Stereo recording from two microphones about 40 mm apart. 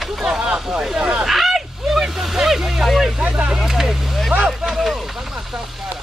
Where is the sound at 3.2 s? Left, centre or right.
Right.